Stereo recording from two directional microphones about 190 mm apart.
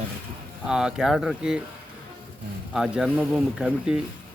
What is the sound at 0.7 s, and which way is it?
Speech, 5° right (ahead or behind).